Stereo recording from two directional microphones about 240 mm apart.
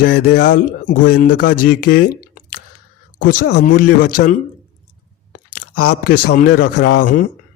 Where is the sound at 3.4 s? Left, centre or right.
Left.